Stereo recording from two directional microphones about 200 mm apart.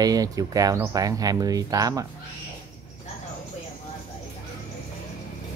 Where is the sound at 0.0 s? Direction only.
20° right (ahead or behind).